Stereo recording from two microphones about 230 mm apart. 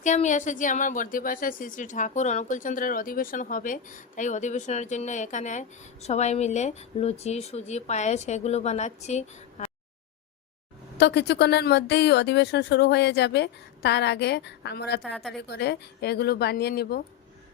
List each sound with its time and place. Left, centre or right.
0.0 s a woman's voice: left
10.9 s speech: left
15.1 s a woman's voice: centre
15.4 s speech: left